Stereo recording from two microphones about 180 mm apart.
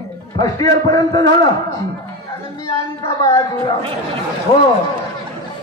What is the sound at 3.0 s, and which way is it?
Speech, 20° left (ahead or behind).